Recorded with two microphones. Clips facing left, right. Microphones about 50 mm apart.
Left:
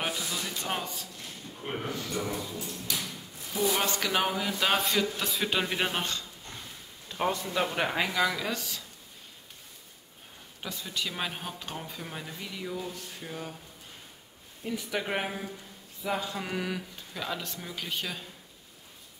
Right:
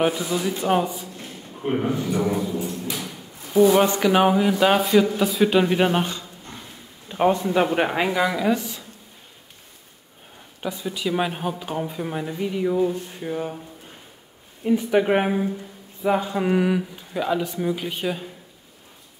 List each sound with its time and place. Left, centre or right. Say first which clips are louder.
0.0 s speech: right 11 dB; centre
7.1 s speech: right 10 dB; right
10.6 s speech: right 8 dB; centre
14.6 s speech: right 13 dB; right